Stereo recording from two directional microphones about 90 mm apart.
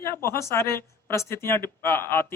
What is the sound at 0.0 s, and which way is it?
Speech, 30° left (ahead or behind).